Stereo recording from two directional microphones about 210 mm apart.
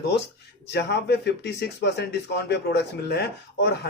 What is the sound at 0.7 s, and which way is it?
A man's voice, 50° left (ahead or behind).